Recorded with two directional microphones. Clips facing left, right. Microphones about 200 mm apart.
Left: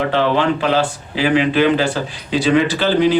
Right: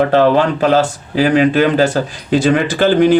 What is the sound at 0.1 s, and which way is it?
Speech, 45° right (ahead or behind).